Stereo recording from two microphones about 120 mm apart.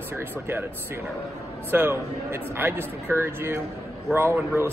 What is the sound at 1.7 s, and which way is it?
A man's voice, 20° right (ahead or behind).